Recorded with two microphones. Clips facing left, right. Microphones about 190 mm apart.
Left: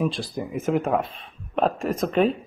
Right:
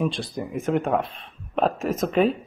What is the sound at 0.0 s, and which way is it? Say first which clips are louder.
Speech: even; centre (ahead or behind).